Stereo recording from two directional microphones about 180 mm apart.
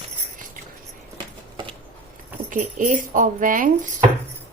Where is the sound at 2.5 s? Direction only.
45° right (ahead or behind).